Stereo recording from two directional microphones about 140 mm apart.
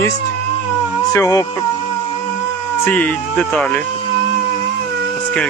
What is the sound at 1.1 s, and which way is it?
Speech, 20° left (ahead or behind).